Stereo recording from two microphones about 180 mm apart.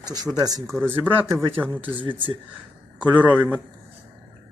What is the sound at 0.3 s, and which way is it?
Speech, 20° right (ahead or behind).